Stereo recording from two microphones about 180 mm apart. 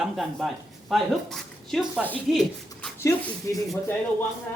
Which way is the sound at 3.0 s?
15° left (ahead or behind).